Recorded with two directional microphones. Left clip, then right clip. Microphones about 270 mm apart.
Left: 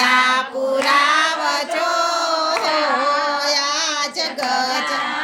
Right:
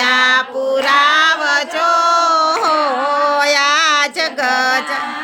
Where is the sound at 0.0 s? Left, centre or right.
Centre.